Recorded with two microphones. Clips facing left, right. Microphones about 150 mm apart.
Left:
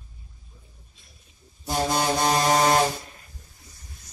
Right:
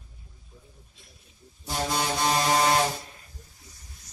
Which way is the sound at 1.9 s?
45° left (ahead or behind).